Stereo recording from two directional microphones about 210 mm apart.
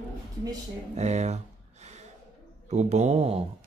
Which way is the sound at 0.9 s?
30° right (ahead or behind).